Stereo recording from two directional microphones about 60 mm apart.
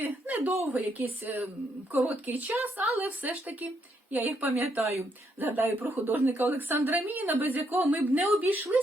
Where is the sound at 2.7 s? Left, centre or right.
Right.